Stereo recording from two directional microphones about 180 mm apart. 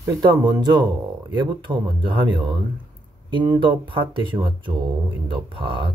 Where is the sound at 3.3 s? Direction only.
25° right (ahead or behind).